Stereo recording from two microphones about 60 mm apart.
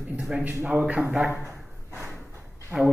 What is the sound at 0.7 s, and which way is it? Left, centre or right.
Speech, centre.